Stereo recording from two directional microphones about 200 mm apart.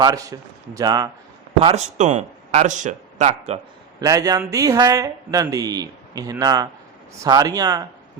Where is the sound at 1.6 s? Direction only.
35° right (ahead or behind).